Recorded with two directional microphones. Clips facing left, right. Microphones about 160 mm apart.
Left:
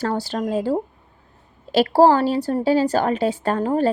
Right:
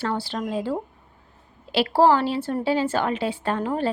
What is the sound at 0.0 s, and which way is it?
A woman's voice, 40° left (ahead or behind).